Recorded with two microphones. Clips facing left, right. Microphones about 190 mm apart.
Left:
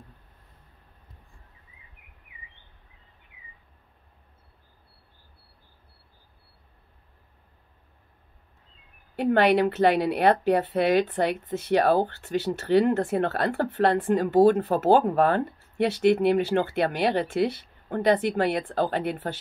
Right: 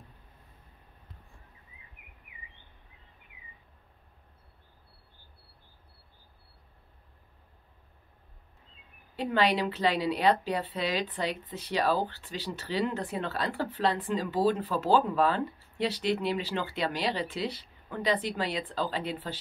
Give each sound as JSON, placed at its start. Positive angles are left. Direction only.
{"t": 9.1, "sound": "a woman's voice", "side_deg": 55}